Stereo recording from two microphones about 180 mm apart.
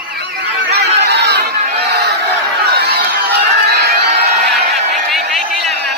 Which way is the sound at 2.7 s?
65° right (ahead or behind).